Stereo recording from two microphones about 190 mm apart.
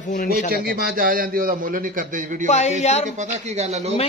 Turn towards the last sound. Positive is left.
turn(degrees=-35)  # may be behind; listen again after turning